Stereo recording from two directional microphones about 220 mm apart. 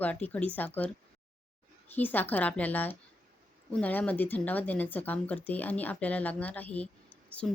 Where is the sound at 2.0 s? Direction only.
10° left (ahead or behind).